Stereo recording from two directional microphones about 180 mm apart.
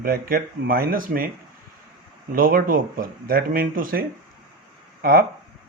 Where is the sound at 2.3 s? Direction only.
55° right (ahead or behind).